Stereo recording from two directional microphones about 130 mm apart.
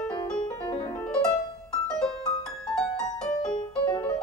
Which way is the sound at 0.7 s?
50° left (ahead or behind).